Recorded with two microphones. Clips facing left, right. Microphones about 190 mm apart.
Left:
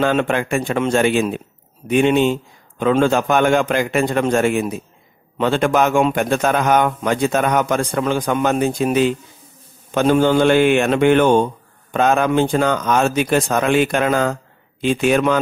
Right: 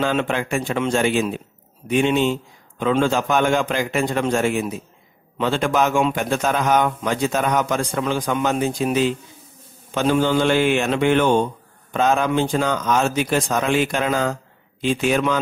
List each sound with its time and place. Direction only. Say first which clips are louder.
0.0 s a man's voice: left 4 dB; 55° left (ahead or behind)